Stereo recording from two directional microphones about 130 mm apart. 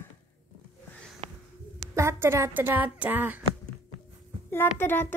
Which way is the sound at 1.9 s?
20° right (ahead or behind).